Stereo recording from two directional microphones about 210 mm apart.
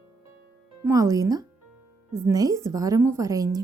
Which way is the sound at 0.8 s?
15° right (ahead or behind).